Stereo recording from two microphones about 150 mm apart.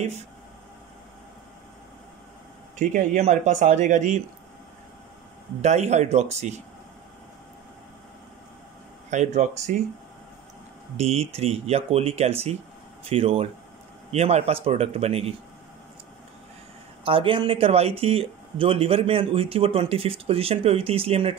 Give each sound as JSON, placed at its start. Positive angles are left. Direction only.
{"t": 2.8, "sound": "speech", "side_deg": -60}
{"t": 5.6, "sound": "speech", "side_deg": -50}
{"t": 9.1, "sound": "speech", "side_deg": -55}
{"t": 11.0, "sound": "speech", "side_deg": -45}
{"t": 17.0, "sound": "speech", "side_deg": -35}